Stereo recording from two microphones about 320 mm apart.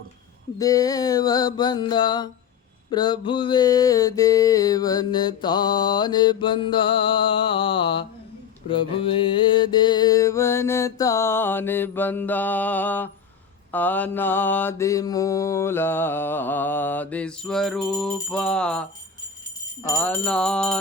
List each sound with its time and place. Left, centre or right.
0.6 s mantra: centre